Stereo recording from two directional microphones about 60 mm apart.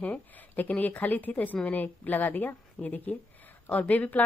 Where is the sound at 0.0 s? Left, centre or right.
Left.